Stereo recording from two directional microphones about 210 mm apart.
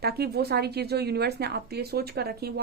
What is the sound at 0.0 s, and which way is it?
Speech, 50° right (ahead or behind).